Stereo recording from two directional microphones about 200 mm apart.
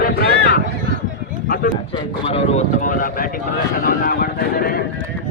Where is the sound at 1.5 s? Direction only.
45° left (ahead or behind).